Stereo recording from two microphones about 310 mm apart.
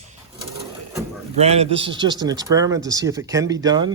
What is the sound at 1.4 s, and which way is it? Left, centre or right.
Speech, centre.